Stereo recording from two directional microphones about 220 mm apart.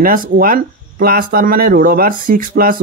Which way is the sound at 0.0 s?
40° right (ahead or behind).